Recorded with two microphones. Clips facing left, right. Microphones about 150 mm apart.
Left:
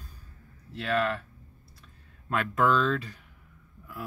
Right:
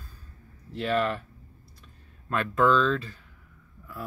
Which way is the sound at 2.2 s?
5° left (ahead or behind).